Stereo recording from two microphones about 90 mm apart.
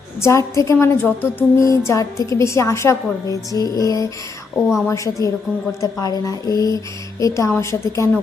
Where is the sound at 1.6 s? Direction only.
35° left (ahead or behind).